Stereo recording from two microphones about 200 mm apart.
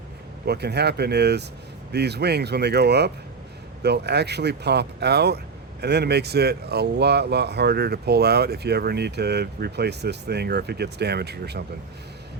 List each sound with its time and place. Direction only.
0.4 s speech: 55° right (ahead or behind)